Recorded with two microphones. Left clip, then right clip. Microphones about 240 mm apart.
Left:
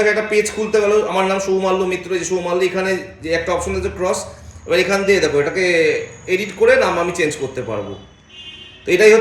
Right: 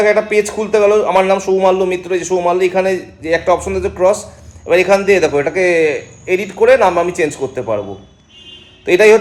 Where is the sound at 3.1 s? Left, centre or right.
Centre.